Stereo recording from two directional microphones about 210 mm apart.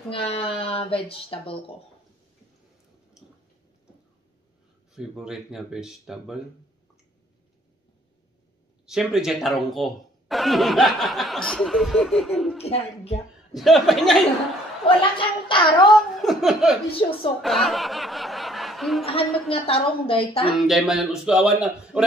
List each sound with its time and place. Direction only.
0.1 s a woman's voice: 25° left (ahead or behind)
4.9 s speech: centre (ahead or behind)
8.8 s speech: centre (ahead or behind)
12.6 s a woman's voice: 30° left (ahead or behind)
13.5 s speech: centre (ahead or behind)
14.9 s speech: 25° left (ahead or behind)
16.2 s laughter: centre (ahead or behind)
16.9 s a woman's voice: 25° left (ahead or behind)
17.4 s snicker: centre (ahead or behind)
19.5 s a woman's voice: 25° left (ahead or behind)
20.5 s speech: centre (ahead or behind)